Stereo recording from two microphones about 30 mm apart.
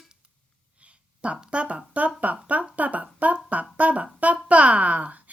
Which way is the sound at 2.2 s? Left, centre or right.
Right.